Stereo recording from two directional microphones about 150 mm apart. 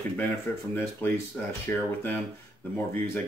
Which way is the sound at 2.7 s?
15° left (ahead or behind).